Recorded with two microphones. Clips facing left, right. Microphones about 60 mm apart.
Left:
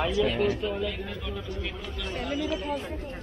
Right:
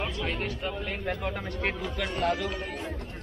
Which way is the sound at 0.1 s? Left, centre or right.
Right.